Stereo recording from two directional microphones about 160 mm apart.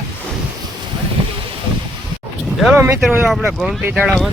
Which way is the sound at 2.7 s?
15° right (ahead or behind).